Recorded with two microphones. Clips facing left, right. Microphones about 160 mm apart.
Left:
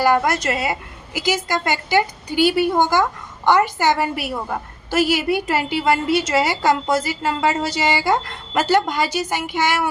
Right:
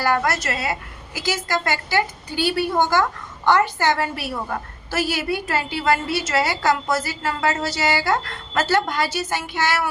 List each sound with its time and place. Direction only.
0.0 s a woman's voice: 15° left (ahead or behind)